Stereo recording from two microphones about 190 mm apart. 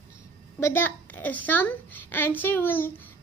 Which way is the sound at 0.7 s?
10° left (ahead or behind).